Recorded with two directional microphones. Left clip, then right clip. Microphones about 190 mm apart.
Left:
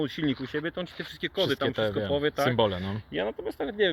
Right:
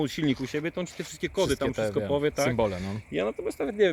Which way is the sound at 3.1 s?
50° right (ahead or behind).